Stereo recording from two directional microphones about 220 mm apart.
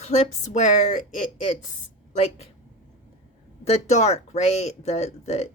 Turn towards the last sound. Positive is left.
turn(degrees=30)  # may be behind; listen again after turning